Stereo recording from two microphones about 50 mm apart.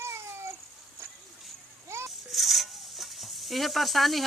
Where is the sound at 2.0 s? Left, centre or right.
Centre.